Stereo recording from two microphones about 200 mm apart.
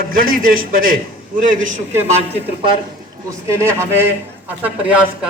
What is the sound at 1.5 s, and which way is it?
Speech, 40° right (ahead or behind).